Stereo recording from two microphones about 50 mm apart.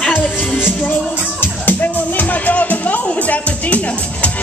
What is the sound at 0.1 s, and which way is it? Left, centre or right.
Music, left.